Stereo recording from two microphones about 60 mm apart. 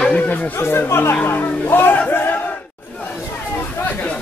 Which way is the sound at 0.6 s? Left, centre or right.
Left.